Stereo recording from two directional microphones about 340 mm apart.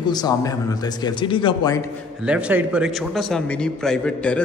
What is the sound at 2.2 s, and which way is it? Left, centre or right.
A man's voice, centre.